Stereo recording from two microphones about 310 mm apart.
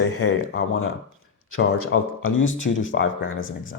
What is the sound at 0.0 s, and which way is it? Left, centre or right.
Speech, left.